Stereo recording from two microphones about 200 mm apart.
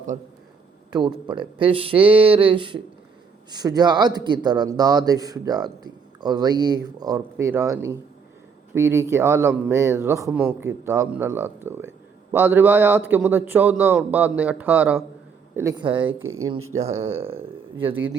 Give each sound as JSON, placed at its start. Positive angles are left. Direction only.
{"t": 0.9, "sound": "a man's voice", "side_deg": -20}
{"t": 15.5, "sound": "speech", "side_deg": -20}
{"t": 16.1, "sound": "speech", "side_deg": -90}
{"t": 17.0, "sound": "speech", "side_deg": -30}